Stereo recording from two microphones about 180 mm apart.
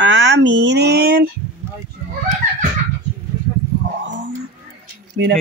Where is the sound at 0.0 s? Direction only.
85° right; by 1.2 s 60° right (ahead or behind).